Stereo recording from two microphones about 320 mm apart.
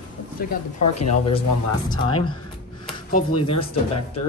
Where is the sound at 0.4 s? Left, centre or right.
Left.